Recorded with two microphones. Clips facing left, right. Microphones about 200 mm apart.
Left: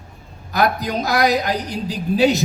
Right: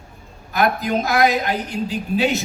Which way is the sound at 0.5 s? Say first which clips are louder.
Even; 40° left (ahead or behind).